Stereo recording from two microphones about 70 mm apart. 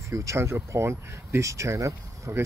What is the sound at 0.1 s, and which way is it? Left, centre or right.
Speech, right.